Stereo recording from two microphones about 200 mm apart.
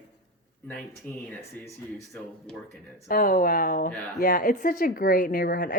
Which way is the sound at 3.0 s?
45° left (ahead or behind).